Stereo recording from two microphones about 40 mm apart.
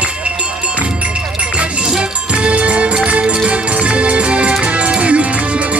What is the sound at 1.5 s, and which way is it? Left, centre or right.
Music, right.